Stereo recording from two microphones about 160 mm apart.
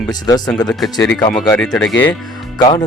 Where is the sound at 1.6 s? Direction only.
5° left (ahead or behind).